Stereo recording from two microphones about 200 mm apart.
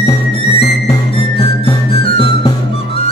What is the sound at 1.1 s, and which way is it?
Music, 30° left (ahead or behind).